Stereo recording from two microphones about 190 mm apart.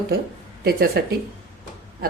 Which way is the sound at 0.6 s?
55° right (ahead or behind).